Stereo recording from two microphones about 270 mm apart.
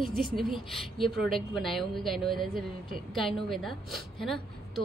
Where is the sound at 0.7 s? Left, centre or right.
Centre.